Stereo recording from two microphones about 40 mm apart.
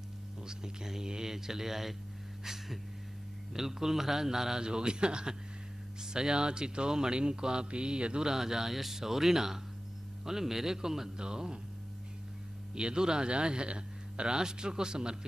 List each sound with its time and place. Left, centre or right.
0.4 s speech: centre
2.4 s a sound: centre
3.5 s speech: centre
4.6 s speech: right
8.3 s speech: centre
12.7 s speech: centre